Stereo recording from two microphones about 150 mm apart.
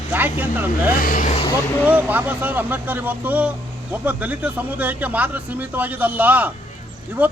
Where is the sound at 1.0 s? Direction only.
70° left (ahead or behind).